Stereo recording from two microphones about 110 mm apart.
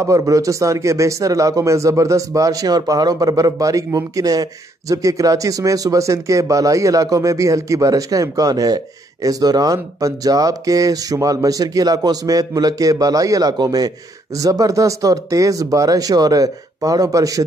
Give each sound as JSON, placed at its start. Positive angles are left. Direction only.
{"t": 0.0, "sound": "speech", "side_deg": -30}